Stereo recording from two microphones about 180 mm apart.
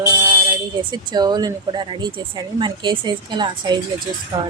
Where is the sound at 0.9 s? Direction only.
25° right (ahead or behind).